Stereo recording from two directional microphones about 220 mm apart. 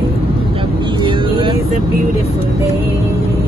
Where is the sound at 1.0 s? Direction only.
20° right (ahead or behind).